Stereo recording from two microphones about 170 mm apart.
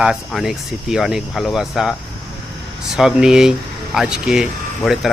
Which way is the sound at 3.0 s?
5° right (ahead or behind).